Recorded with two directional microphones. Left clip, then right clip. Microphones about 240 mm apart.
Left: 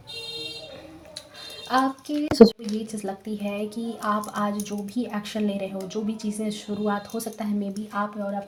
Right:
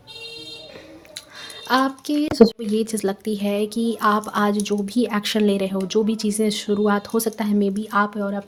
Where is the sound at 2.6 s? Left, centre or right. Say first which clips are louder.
Right 9 dB; right.